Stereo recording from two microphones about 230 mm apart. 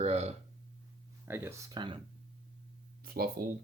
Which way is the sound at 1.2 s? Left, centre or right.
Centre.